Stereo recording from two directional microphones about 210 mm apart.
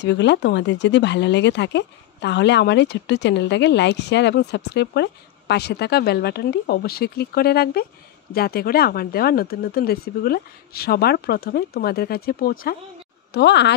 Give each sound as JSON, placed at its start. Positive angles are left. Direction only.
{"t": 0.0, "sound": "speech", "side_deg": 55}